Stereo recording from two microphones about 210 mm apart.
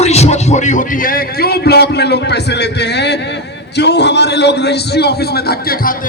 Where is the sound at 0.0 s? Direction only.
30° left (ahead or behind).